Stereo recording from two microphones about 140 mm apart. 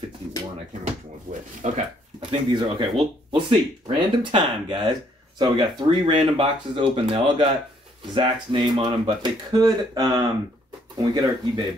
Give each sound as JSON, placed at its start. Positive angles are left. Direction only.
{"t": 1.3, "sound": "speech", "side_deg": -55}
{"t": 2.5, "sound": "speech", "side_deg": -35}
{"t": 5.9, "sound": "speech", "side_deg": -45}